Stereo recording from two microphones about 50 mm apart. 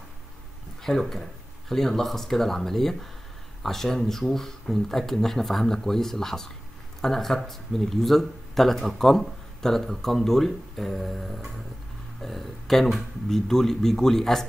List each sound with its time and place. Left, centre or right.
0.8 s speech: centre